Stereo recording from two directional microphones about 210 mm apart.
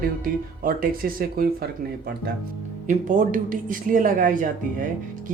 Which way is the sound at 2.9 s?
40° right (ahead or behind).